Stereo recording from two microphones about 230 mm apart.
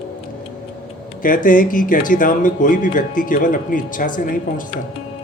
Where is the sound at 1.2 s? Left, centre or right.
Left.